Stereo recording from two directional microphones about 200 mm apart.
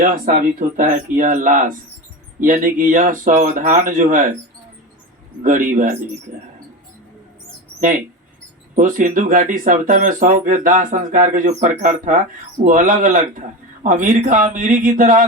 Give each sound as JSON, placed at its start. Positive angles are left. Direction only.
{"t": 0.0, "sound": "speech", "side_deg": -40}
{"t": 5.4, "sound": "speech", "side_deg": -40}
{"t": 7.8, "sound": "speech", "side_deg": -40}